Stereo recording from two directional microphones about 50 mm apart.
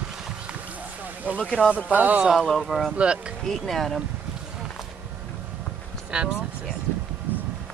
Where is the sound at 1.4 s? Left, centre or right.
Left.